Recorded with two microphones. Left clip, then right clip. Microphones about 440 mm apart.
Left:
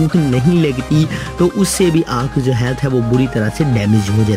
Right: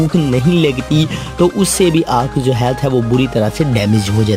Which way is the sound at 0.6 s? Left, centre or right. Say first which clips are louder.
Right 2 dB; centre.